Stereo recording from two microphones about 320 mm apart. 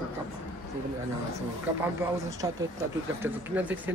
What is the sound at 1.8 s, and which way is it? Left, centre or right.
Speech, centre.